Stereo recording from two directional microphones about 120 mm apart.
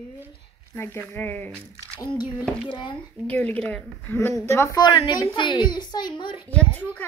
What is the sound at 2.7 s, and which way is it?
Speech, 40° left (ahead or behind).